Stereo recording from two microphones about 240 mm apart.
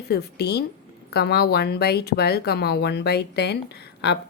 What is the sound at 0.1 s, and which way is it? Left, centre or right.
Speech, left.